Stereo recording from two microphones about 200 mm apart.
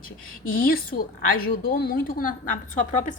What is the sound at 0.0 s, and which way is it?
A woman's voice, 45° left (ahead or behind).